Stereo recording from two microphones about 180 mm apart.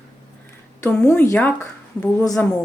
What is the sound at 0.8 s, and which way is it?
Speech, 5° left (ahead or behind).